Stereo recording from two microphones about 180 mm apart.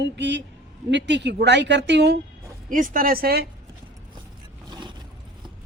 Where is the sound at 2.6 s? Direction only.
50° right (ahead or behind).